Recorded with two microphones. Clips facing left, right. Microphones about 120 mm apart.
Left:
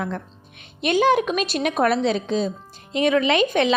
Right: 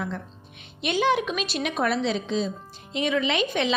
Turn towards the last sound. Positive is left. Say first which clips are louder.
# left 6 dB
turn(degrees=55)  # may be behind; listen again after turning